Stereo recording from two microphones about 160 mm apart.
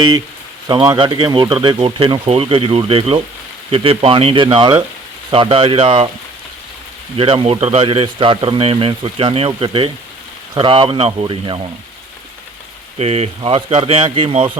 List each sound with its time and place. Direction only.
0.7 s a man's voice: 30° right (ahead or behind)
7.2 s a man's voice: 35° right (ahead or behind)
13.0 s a man's voice: 40° right (ahead or behind)